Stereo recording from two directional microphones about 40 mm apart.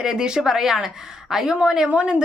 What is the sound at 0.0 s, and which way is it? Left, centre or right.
A woman's voice, centre.